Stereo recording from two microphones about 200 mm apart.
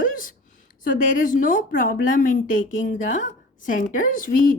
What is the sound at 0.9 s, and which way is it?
A woman's voice, 40° left (ahead or behind).